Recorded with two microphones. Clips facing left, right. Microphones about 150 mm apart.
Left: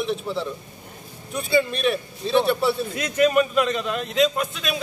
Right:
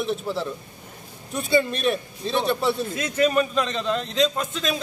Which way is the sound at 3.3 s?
10° left (ahead or behind).